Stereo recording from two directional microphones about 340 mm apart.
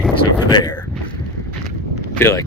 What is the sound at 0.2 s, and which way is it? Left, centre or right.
Speech, centre.